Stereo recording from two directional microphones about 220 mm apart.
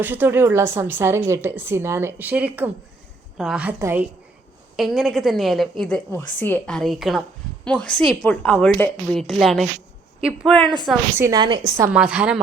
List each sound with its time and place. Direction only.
0.0 s a woman's voice: 10° right (ahead or behind)
4.8 s a woman's voice: centre (ahead or behind)
11.2 s a woman's voice: 20° right (ahead or behind)
11.8 s a woman's voice: 5° right (ahead or behind)